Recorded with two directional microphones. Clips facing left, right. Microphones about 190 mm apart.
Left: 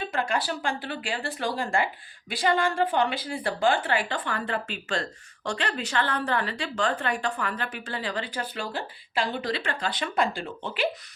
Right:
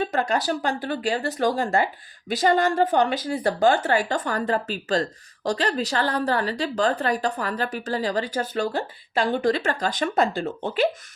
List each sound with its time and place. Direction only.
0.1 s a woman's voice: 40° right (ahead or behind)